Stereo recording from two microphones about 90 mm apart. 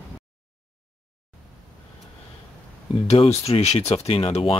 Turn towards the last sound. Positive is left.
turn(degrees=85)